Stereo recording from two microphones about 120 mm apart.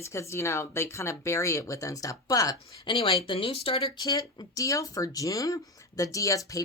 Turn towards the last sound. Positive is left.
turn(degrees=25)  # may be behind; listen again after turning